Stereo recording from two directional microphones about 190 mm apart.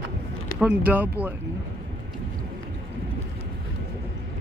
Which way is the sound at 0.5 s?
5° right (ahead or behind).